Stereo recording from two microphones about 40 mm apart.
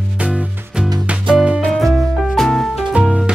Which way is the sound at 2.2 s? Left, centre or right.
Centre.